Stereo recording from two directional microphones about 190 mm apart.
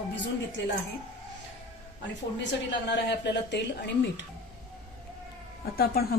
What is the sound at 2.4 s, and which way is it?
A woman's voice, 65° left (ahead or behind).